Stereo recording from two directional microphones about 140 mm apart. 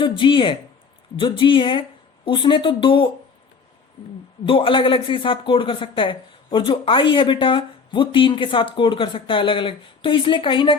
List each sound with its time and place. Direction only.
0.0 s speech: 35° left (ahead or behind)
4.4 s speech: 40° left (ahead or behind)